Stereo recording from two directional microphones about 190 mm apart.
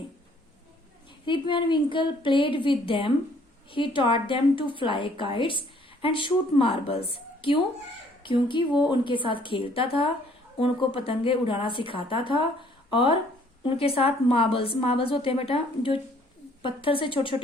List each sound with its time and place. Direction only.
1.2 s a woman's voice: 25° left (ahead or behind)